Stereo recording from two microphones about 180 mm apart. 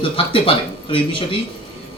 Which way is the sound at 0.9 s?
30° left (ahead or behind).